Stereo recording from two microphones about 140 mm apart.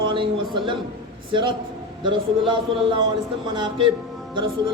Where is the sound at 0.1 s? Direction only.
35° right (ahead or behind).